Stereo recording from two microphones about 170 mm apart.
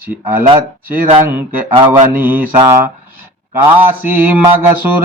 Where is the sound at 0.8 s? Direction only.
60° right (ahead or behind).